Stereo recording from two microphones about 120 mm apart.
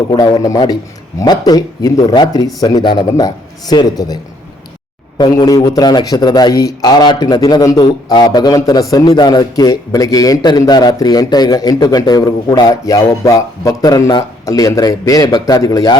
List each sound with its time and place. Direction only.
0.1 s a man's voice: 35° left (ahead or behind)